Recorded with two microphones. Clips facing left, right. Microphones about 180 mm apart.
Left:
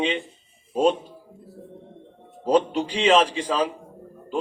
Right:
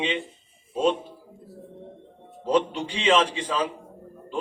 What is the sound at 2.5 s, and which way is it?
A man's voice, 35° left (ahead or behind).